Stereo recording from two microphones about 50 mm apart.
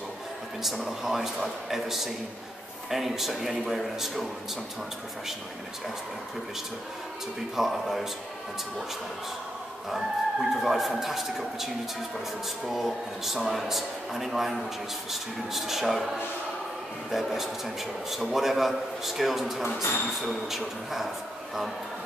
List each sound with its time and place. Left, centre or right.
0.6 s a man's voice: centre
7.5 s a man's voice: centre
9.8 s a man's voice: centre
17.1 s a man's voice: centre